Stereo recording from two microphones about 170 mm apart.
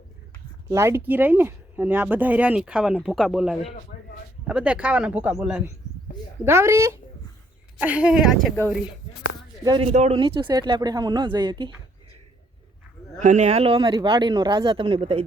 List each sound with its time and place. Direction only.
0.7 s speech: 15° right (ahead or behind)
6.4 s speech: 15° right (ahead or behind)
9.6 s speech: 30° right (ahead or behind)
9.9 s speech: 40° right (ahead or behind)
10.2 s speech: 30° right (ahead or behind)
13.1 s speech: 45° right (ahead or behind)